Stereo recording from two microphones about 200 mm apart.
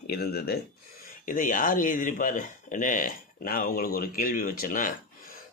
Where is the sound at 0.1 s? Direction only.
50° left (ahead or behind).